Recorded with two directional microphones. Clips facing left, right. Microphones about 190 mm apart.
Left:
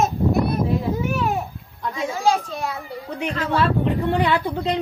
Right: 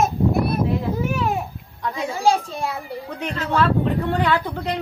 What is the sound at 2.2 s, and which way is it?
Speech, 30° right (ahead or behind).